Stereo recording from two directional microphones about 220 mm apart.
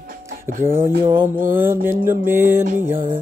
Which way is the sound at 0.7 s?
10° right (ahead or behind).